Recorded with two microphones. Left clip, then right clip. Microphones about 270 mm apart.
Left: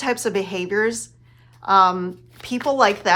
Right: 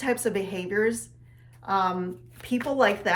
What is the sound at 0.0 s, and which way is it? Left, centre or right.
Speech, left.